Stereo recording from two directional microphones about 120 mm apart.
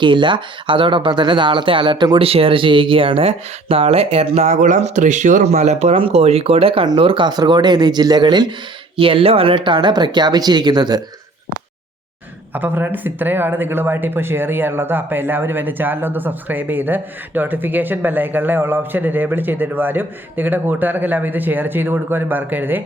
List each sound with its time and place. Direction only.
0.0 s speech: 40° right (ahead or behind)
2.1 s speech: 50° right (ahead or behind)
6.0 s speech: 55° right (ahead or behind); by 8.5 s 40° right (ahead or behind)
9.0 s speech: 50° right (ahead or behind)
12.5 s speech: 15° right (ahead or behind)